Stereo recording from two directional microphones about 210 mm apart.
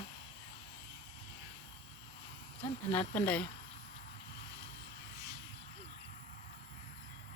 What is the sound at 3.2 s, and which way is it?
Speech, 5° left (ahead or behind).